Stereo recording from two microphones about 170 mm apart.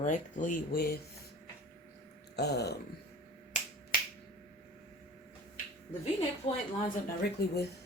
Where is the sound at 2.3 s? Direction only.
75° left (ahead or behind).